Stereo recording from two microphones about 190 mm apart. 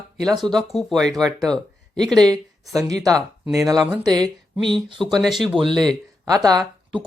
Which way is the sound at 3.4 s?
15° right (ahead or behind).